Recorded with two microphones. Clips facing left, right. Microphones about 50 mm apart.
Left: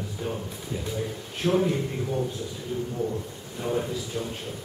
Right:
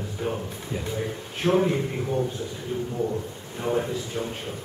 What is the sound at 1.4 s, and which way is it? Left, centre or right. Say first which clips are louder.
Speech: right 2 dB; right.